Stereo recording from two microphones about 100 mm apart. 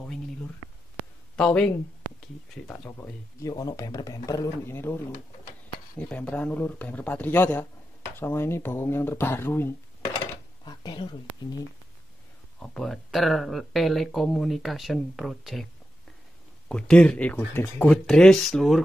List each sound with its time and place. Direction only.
1.3 s speech: 10° left (ahead or behind)
2.9 s speech: 25° left (ahead or behind)
3.5 s speech: 35° left (ahead or behind)
4.6 s speech: 25° left (ahead or behind)
10.6 s a sound: 45° left (ahead or behind)
12.5 s speech: 10° left (ahead or behind)
16.6 s speech: 10° left (ahead or behind)